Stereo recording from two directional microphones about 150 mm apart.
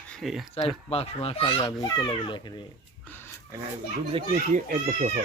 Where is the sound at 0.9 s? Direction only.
40° left (ahead or behind).